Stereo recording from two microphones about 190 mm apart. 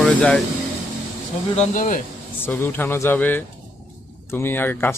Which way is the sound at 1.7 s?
45° left (ahead or behind).